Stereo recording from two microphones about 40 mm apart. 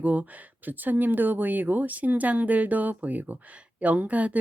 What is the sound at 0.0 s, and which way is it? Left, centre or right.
Speech, right.